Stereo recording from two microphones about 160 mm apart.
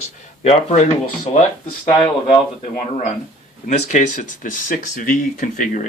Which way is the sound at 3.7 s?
50° left (ahead or behind).